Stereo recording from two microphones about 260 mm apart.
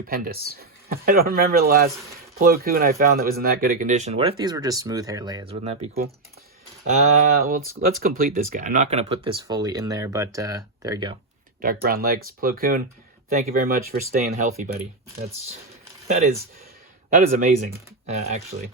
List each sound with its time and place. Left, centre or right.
0.1 s speech: right
6.8 s speech: right; by 11.2 s centre
11.6 s speech: right
16.0 s speech: right